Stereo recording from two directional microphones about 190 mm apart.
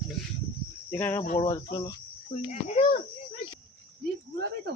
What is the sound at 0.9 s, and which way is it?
Speech, 10° left (ahead or behind).